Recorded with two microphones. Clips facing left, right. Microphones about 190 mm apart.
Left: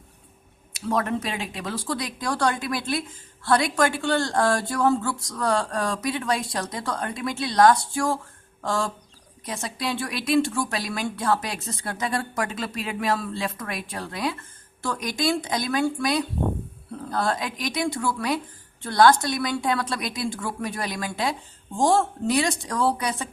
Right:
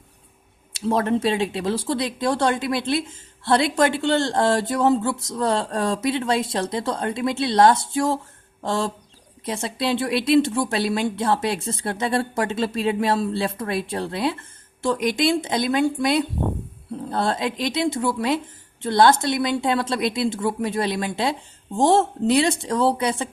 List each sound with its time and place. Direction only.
0.7 s speech: 30° right (ahead or behind)